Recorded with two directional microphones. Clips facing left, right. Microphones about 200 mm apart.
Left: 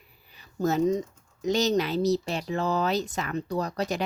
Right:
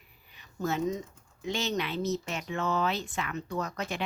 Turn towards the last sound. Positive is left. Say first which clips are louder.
# left 5 dB
turn(degrees=35)  # may be behind; listen again after turning